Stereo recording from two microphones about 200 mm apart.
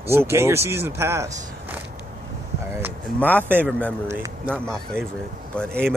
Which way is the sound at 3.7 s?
5° left (ahead or behind).